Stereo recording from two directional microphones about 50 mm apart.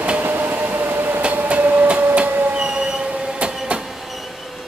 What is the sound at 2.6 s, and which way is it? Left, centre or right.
Train, centre.